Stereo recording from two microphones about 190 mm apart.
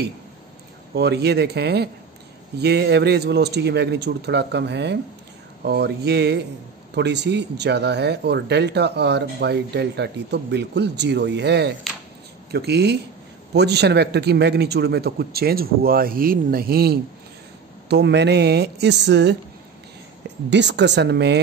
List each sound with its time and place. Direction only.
0.9 s speech: 60° right (ahead or behind)
20.4 s speech: 65° right (ahead or behind)